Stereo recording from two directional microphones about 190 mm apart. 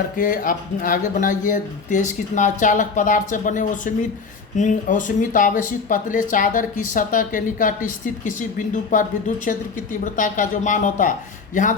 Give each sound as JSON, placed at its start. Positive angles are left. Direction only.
{"t": 0.2, "sound": "speech", "side_deg": 45}